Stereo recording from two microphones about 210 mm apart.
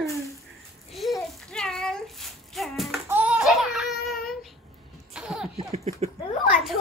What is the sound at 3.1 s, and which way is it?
Babbling, 5° right (ahead or behind).